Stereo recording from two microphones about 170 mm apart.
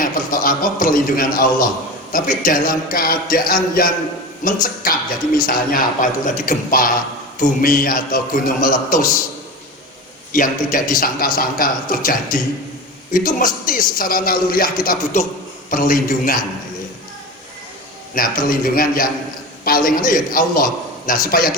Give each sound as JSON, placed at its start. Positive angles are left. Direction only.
{"t": 0.0, "sound": "speech", "side_deg": 55}
{"t": 10.3, "sound": "speech", "side_deg": 50}
{"t": 18.1, "sound": "speech", "side_deg": 55}